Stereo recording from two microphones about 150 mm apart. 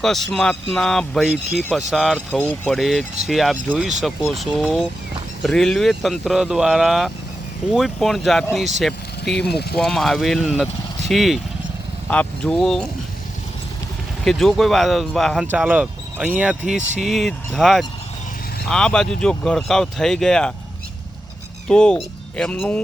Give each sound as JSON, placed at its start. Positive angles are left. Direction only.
{"t": 0.0, "sound": "speech", "side_deg": 0}
{"t": 2.4, "sound": "speech", "side_deg": 10}
{"t": 2.7, "sound": "speech", "side_deg": 0}
{"t": 9.5, "sound": "speech", "side_deg": 90}
{"t": 9.7, "sound": "speech", "side_deg": 0}
{"t": 14.3, "sound": "speech", "side_deg": 0}
{"t": 15.5, "sound": "speech", "side_deg": -10}
{"t": 21.7, "sound": "speech", "side_deg": 5}